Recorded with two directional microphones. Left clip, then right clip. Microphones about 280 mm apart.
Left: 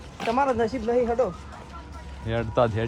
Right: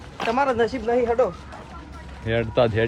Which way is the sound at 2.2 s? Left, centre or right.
Centre.